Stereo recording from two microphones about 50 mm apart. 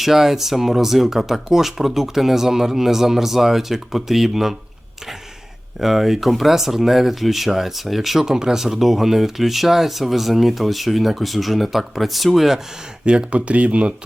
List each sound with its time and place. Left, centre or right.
0.0 s speech: centre
5.8 s speech: centre
8.2 s speech: centre
13.1 s speech: right